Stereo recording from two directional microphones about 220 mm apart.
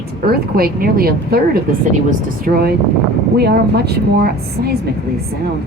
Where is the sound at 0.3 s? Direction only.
45° right (ahead or behind).